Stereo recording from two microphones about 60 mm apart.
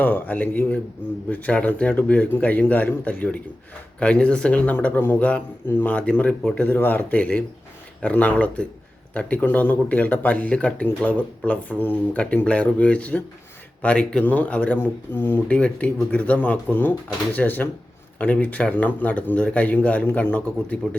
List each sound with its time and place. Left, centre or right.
0.0 s speech: left
5.9 s speech: centre
6.6 s speech: left
12.1 s speech: centre
15.1 s speech: left
15.4 s speech: left